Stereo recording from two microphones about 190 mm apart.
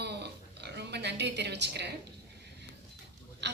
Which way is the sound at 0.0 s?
60° right (ahead or behind).